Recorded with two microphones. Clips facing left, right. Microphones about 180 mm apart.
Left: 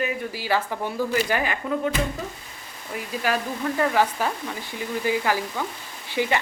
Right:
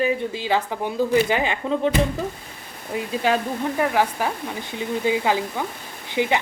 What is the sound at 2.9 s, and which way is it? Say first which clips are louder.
Speech: right 4 dB; 25° right (ahead or behind).